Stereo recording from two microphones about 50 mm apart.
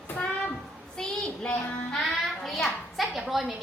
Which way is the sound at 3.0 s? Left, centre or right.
Centre.